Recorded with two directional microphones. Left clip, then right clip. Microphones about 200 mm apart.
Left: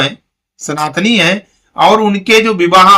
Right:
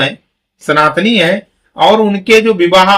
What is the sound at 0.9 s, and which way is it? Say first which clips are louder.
Speech: even; 25° left (ahead or behind).